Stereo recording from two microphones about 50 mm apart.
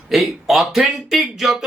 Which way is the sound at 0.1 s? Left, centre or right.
Centre.